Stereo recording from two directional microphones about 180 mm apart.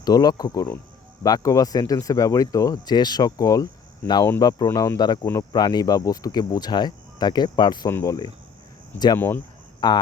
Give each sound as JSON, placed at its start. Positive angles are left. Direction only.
{"t": 0.0, "sound": "speech", "side_deg": 20}
{"t": 9.8, "sound": "speech", "side_deg": 25}